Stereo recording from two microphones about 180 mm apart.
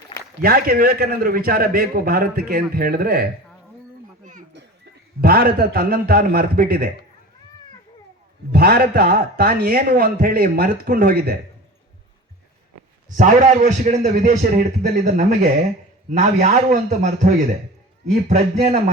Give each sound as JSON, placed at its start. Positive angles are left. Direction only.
{"t": 0.4, "sound": "a man's voice", "side_deg": -55}
{"t": 4.2, "sound": "children playing", "side_deg": -45}
{"t": 5.2, "sound": "a man's voice", "side_deg": -55}
{"t": 8.5, "sound": "a man's voice", "side_deg": -55}
{"t": 13.1, "sound": "a man's voice", "side_deg": -45}